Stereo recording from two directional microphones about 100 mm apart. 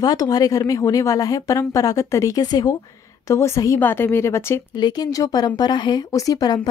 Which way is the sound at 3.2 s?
30° left (ahead or behind).